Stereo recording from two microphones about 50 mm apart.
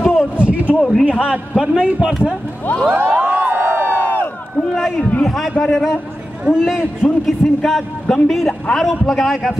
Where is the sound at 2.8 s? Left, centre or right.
Right.